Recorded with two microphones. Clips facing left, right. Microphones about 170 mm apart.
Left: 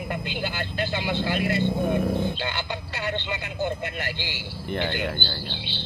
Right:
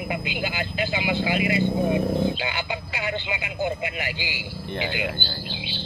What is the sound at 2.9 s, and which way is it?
Vehicle, 10° right (ahead or behind).